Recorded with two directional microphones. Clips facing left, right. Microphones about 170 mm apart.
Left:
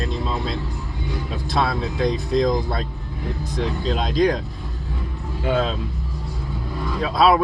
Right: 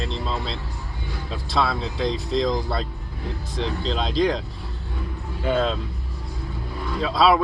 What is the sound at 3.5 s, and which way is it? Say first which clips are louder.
Speech: left 2 dB; 50° left (ahead or behind).